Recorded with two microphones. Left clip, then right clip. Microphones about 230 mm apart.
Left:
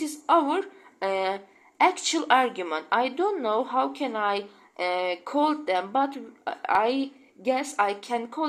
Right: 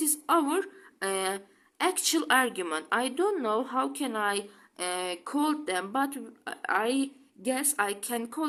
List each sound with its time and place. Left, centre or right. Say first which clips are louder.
0.0 s a woman's voice: left 4 dB; right